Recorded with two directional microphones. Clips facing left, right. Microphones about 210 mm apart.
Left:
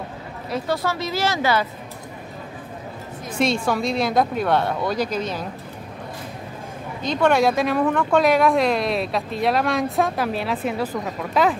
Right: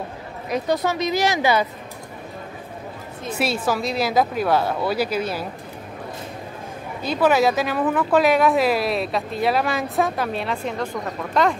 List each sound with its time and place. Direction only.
0.5 s speech: 20° right (ahead or behind)
3.3 s speech: 5° right (ahead or behind)
7.0 s speech: 5° right (ahead or behind)